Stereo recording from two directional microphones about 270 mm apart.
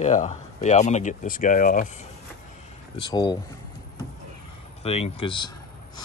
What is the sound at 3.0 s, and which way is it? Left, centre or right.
Speech, centre.